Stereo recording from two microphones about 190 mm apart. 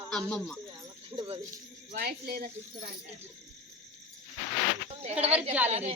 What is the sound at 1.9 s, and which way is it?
Speech, 55° right (ahead or behind).